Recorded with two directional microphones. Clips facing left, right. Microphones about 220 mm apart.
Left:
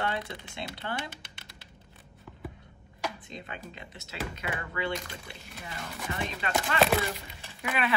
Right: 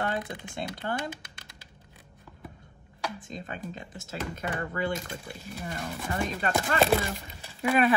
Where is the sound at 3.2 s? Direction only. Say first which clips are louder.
Right 4 dB; 45° right (ahead or behind).